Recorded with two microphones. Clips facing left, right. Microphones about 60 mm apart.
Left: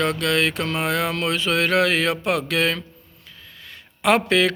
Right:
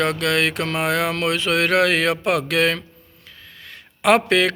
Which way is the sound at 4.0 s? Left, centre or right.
Right.